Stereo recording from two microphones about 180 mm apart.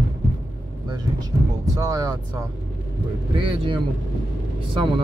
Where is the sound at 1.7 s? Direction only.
20° right (ahead or behind).